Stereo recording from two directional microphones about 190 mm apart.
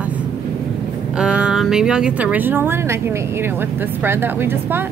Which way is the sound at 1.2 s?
5° right (ahead or behind).